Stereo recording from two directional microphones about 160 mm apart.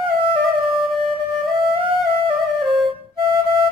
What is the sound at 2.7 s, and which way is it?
Music, 30° right (ahead or behind).